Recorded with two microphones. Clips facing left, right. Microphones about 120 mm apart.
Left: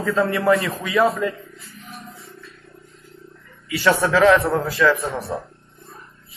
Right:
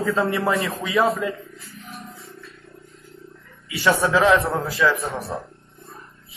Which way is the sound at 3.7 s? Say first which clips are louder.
Left 1 dB; 25° right (ahead or behind).